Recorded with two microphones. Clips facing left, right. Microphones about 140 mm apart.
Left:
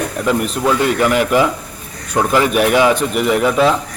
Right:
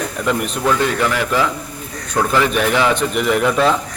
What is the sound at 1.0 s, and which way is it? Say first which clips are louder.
A man's voice: left 4 dB; 15° left (ahead or behind).